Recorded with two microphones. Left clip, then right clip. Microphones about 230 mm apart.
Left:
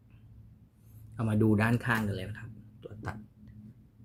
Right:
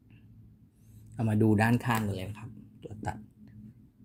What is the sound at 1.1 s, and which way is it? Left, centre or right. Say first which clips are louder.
Speech: right 1 dB; centre.